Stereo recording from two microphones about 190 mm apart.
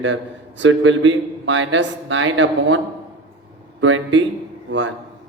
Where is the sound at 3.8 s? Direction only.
90° right.